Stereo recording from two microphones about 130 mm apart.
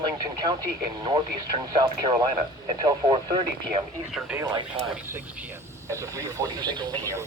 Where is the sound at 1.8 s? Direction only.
35° right (ahead or behind).